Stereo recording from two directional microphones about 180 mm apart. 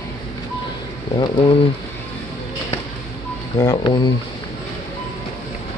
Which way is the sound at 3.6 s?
20° left (ahead or behind).